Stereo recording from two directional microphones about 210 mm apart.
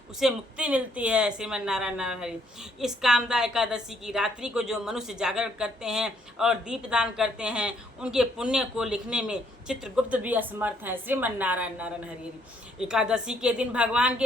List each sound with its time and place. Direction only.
0.2 s a woman's voice: 5° right (ahead or behind)